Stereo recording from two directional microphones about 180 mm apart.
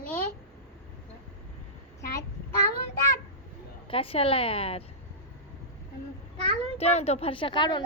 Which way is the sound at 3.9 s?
30° left (ahead or behind).